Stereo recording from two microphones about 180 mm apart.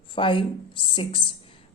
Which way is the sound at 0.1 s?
25° left (ahead or behind).